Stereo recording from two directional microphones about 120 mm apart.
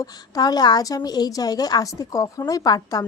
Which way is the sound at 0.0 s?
35° left (ahead or behind).